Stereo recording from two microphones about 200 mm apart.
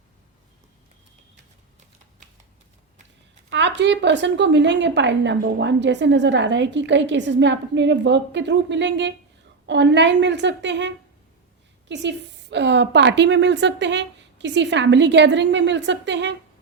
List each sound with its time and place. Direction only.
3.8 s a woman's voice: 60° right (ahead or behind)